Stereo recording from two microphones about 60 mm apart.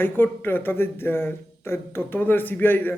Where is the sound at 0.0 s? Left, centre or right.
Left.